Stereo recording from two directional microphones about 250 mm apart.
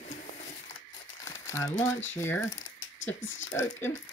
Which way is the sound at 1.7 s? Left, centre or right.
Left.